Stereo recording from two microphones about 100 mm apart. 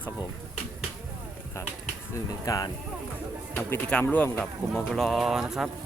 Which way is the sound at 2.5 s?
35° left (ahead or behind).